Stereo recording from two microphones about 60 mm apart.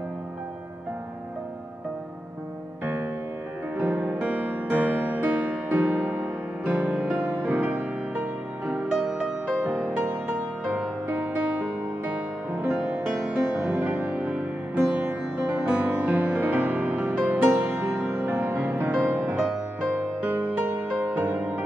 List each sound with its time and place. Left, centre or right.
2.8 s music: right
8.9 s music: centre; by 21.6 s right